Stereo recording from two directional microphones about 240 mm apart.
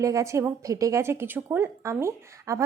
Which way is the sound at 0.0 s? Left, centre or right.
Centre.